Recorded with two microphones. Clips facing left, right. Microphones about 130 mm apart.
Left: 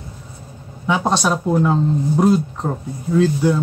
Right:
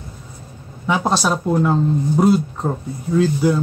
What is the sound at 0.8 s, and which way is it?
Speech, centre (ahead or behind).